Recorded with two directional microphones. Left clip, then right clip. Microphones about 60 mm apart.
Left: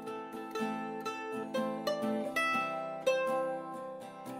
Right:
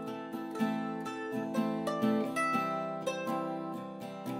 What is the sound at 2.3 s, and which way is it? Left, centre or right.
Music, left.